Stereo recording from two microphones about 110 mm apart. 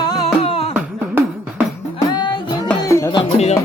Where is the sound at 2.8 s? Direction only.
30° left (ahead or behind).